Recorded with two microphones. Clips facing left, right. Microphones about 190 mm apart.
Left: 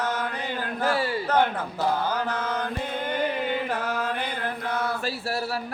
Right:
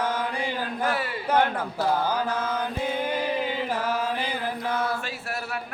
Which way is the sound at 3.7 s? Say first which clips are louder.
Right 1 dB; 10° right (ahead or behind).